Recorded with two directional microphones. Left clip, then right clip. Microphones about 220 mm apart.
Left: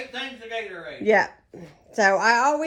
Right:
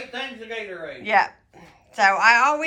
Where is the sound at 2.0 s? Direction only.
25° left (ahead or behind).